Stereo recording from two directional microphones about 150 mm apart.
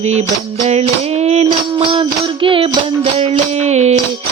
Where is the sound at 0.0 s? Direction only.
45° right (ahead or behind).